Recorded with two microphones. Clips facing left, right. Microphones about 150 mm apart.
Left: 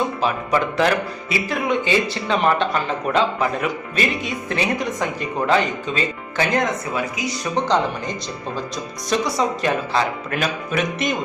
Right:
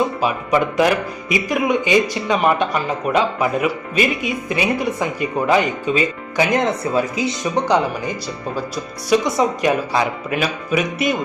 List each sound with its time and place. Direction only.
0.2 s speech: 10° right (ahead or behind)
6.6 s speech: 30° right (ahead or behind)
7.5 s speech: 10° right (ahead or behind)
9.2 s speech: 15° right (ahead or behind)